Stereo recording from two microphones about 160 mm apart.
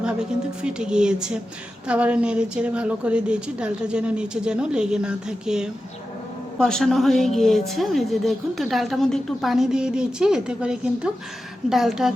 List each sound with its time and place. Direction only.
0.0 s a woman's voice: 5° right (ahead or behind)